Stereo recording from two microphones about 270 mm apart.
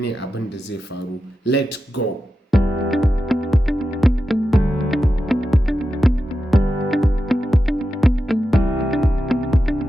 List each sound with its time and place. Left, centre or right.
2.0 s speech: left
2.5 s music: centre